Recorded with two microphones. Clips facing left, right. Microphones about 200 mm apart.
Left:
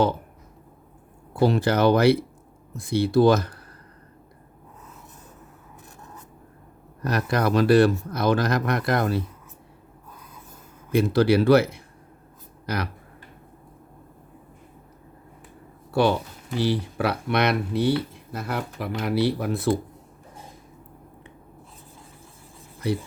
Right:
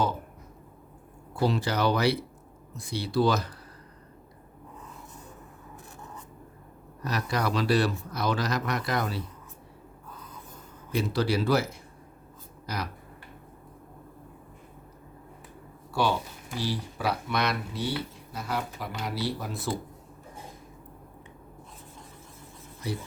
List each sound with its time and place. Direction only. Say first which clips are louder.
1.4 s speech: left 6 dB; 55° left (ahead or behind)
7.0 s speech: left 6 dB; 55° left (ahead or behind)
10.9 s speech: left 8 dB; 60° left (ahead or behind)
15.9 s speech: left 6 dB; 60° left (ahead or behind)
22.8 s speech: left 8 dB; 65° left (ahead or behind)